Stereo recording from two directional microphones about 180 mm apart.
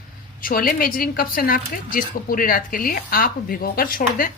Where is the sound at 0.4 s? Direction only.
55° left (ahead or behind).